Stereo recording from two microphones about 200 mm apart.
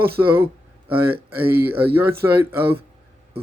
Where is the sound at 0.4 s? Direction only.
25° right (ahead or behind).